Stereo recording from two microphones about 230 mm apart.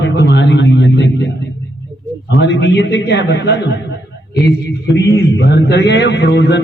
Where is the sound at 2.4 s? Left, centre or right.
Left.